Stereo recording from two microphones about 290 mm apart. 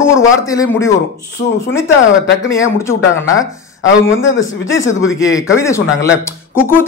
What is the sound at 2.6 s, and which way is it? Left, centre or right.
Speech, centre.